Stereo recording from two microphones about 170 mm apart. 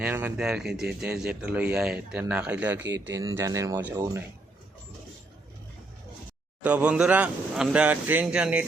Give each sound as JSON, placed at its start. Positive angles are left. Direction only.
{"t": 0.0, "sound": "a man's voice", "side_deg": -10}
{"t": 6.6, "sound": "speech", "side_deg": -10}